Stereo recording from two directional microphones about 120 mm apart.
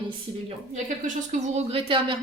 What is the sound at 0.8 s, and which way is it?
Speech, 90° right.